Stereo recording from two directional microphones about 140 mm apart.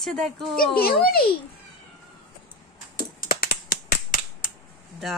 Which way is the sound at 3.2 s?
90° left.